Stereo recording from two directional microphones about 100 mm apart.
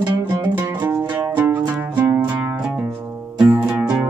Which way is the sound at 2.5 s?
10° right (ahead or behind).